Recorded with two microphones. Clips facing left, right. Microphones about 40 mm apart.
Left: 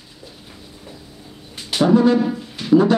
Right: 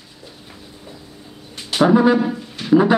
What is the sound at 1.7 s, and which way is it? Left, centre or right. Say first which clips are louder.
Speech: right 1 dB; centre.